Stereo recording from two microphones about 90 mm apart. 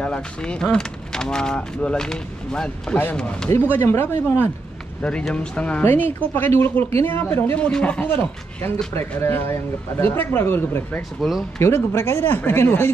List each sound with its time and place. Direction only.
0.0 s speech: 10° left (ahead or behind)
3.7 s speech: 25° left (ahead or behind)
5.3 s speech: 10° left (ahead or behind)
7.6 s speech: 15° left (ahead or behind)
11.0 s speech: centre (ahead or behind)
11.6 s speech: 30° left (ahead or behind)